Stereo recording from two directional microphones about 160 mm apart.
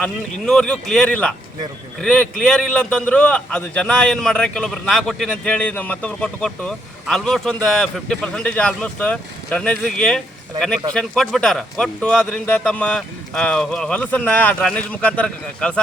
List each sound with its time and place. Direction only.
0.0 s a man's voice: 5° left (ahead or behind)